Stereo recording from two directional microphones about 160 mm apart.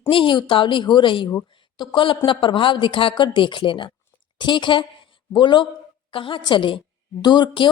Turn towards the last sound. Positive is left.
turn(degrees=30)  # may be behind; listen again after turning